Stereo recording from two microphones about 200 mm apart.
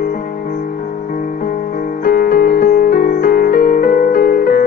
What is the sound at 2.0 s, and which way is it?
Music, 45° left (ahead or behind).